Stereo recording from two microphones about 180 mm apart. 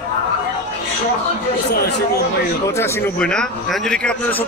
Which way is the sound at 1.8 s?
65° left (ahead or behind).